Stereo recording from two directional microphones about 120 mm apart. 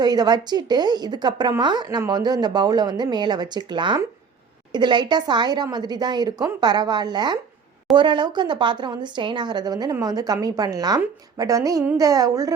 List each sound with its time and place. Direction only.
0.0 s a woman's voice: 35° right (ahead or behind)